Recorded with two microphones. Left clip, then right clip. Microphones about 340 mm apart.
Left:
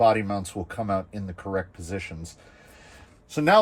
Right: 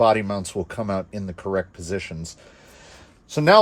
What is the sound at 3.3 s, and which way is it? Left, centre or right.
Speech, right.